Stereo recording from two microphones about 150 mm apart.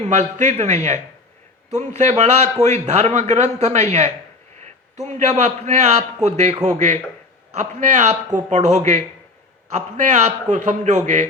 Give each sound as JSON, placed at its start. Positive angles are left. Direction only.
{"t": 0.1, "sound": "a man's voice", "side_deg": -50}
{"t": 2.0, "sound": "a man's voice", "side_deg": -50}